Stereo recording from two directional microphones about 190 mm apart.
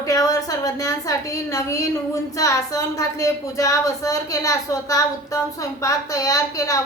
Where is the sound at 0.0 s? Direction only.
20° left (ahead or behind).